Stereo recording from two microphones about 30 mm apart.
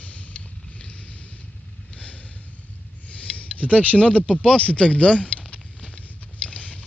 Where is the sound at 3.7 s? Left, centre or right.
Left.